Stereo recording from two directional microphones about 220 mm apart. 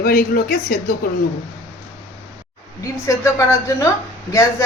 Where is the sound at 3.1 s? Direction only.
15° left (ahead or behind).